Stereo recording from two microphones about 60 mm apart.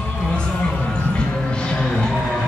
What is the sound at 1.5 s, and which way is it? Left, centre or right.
Music, centre.